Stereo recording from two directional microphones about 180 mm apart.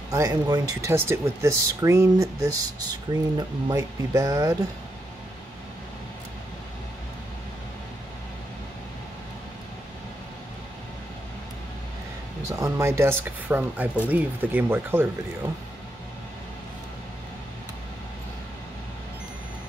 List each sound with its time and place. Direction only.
0.1 s speech: 20° right (ahead or behind)
12.4 s speech: 15° right (ahead or behind)